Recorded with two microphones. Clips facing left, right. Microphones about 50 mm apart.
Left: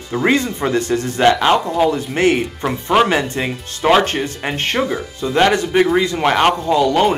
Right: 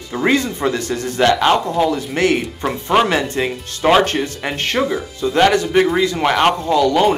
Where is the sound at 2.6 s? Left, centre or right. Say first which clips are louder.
Left 1 dB; centre.